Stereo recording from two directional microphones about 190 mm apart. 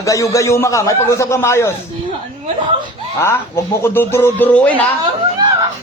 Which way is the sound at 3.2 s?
15° left (ahead or behind).